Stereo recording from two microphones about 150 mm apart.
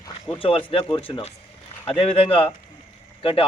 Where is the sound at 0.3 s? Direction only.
35° left (ahead or behind).